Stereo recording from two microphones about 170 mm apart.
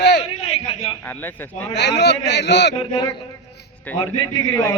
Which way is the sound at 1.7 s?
90° left.